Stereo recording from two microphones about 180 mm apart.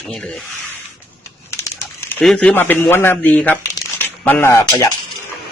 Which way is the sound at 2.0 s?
10° left (ahead or behind).